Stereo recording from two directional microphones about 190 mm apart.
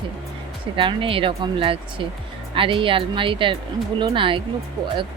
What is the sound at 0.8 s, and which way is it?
Speech, 25° right (ahead or behind).